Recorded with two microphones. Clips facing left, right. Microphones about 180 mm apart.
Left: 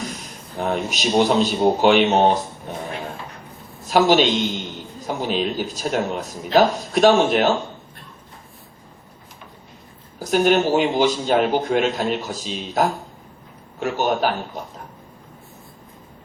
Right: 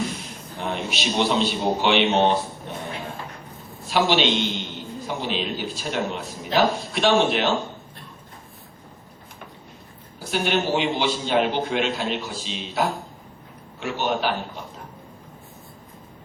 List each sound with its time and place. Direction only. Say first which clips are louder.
0.5 s a man's voice: left 5 dB; 40° left (ahead or behind)
3.8 s a man's voice: left 5 dB; 45° left (ahead or behind)
10.2 s a man's voice: left 7 dB; 45° left (ahead or behind)